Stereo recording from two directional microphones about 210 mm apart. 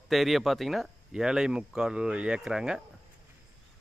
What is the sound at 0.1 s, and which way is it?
Speech, centre (ahead or behind).